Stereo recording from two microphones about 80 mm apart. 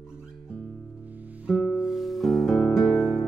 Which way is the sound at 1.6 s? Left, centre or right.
Centre.